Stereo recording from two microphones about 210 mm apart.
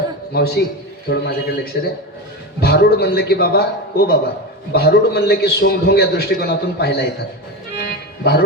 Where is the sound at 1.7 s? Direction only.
50° left (ahead or behind).